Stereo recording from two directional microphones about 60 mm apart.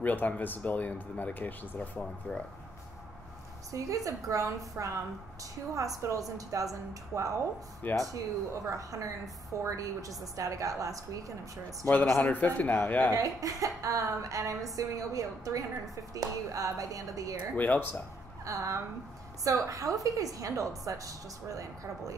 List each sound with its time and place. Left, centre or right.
0.0 s speech: left
3.7 s a woman's voice: right
7.8 s speech: left
8.6 s a woman's voice: right
12.2 s speech: left
13.1 s a woman's voice: right
17.6 s speech: left
18.4 s a woman's voice: right